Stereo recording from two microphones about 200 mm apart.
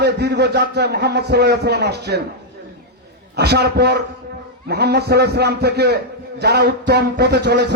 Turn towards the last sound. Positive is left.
turn(degrees=-55)  # may be behind; listen again after turning